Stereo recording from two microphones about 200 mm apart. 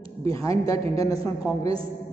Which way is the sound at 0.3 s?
15° left (ahead or behind).